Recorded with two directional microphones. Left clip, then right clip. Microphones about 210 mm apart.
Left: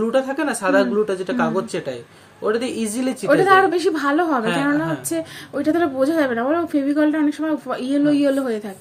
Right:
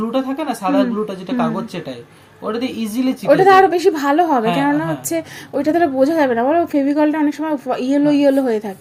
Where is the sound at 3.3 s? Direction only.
15° right (ahead or behind).